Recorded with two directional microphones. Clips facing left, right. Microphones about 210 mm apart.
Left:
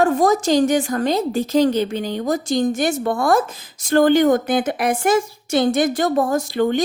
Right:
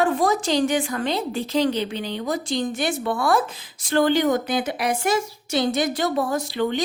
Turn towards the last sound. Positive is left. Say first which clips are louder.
# left 5 dB
turn(degrees=45)  # may be behind; listen again after turning